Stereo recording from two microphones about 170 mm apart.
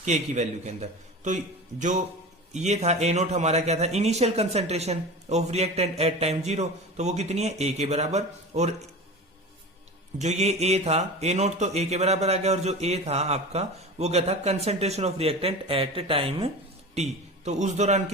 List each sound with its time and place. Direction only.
0.0 s a man's voice: 45° right (ahead or behind)
2.5 s speech: 40° right (ahead or behind)
10.2 s a man's voice: 40° right (ahead or behind)